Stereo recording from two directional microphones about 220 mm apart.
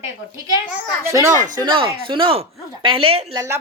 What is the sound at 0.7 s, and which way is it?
A woman's voice, 15° right (ahead or behind).